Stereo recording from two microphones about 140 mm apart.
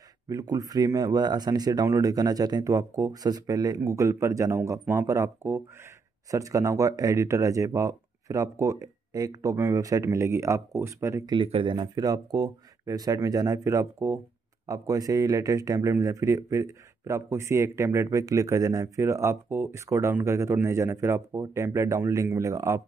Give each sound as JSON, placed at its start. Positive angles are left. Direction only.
{"t": 0.3, "sound": "speech", "side_deg": -25}
{"t": 11.3, "sound": "speech", "side_deg": -40}